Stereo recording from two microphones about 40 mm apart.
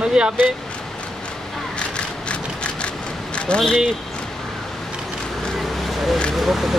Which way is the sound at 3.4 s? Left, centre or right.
Left.